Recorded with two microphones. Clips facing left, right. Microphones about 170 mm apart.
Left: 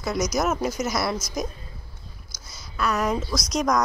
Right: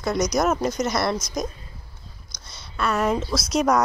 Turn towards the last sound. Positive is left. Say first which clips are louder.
# right 3 dB
turn(degrees=-5)  # may be behind; listen again after turning